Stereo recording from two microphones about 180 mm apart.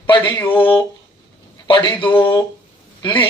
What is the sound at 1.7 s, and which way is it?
Speech, 25° left (ahead or behind).